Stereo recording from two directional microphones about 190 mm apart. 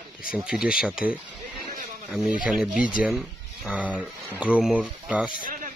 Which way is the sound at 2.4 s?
5° right (ahead or behind).